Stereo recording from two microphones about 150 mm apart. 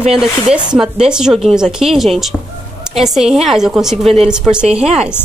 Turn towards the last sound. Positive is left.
turn(degrees=-45)  # may be behind; listen again after turning